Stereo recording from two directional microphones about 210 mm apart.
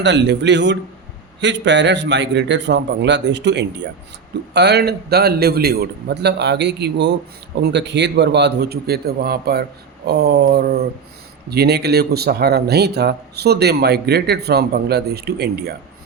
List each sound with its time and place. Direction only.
0.0 s a man's voice: 55° right (ahead or behind)